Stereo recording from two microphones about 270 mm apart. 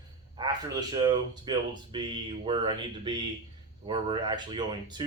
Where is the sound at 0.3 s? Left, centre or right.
Centre.